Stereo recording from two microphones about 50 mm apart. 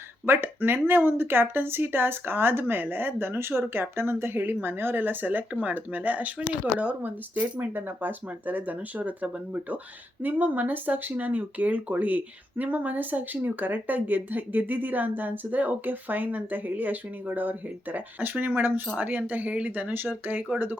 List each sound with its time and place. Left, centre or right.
0.3 s speech: right